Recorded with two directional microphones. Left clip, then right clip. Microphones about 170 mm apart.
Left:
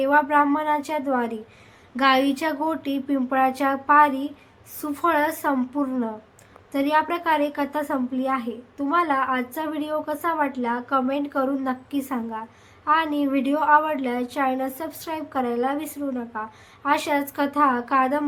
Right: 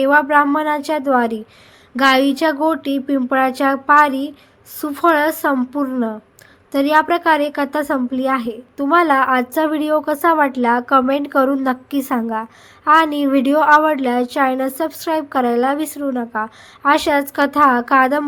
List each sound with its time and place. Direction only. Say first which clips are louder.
0.0 s a woman's voice: right 6 dB; 40° right (ahead or behind)